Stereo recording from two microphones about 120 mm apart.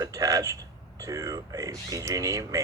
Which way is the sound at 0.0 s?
30° right (ahead or behind).